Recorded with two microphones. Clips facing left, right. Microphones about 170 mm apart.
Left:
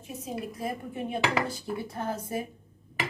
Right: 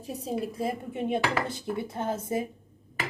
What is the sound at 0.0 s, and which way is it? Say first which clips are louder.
Dishes: right 4 dB; 35° right (ahead or behind).